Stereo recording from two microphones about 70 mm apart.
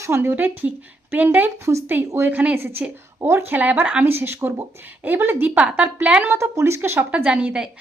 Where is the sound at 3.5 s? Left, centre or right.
Right.